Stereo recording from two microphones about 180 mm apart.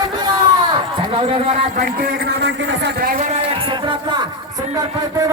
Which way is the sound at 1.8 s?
65° right (ahead or behind).